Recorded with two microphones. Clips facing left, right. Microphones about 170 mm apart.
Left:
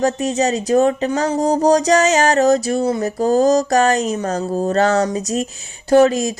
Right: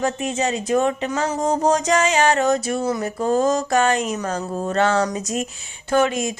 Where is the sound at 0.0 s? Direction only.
40° left (ahead or behind).